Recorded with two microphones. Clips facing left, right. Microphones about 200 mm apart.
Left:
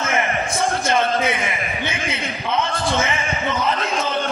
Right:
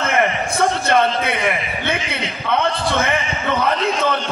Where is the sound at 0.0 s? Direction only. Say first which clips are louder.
Right 3 dB; 60° right (ahead or behind).